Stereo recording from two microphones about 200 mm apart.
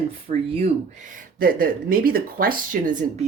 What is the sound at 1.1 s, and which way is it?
Speech, 45° right (ahead or behind).